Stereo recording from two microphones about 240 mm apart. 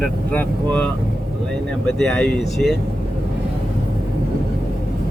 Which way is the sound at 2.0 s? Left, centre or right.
Centre.